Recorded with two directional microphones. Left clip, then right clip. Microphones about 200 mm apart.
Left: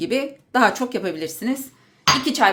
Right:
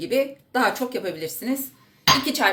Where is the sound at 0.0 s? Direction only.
55° left (ahead or behind).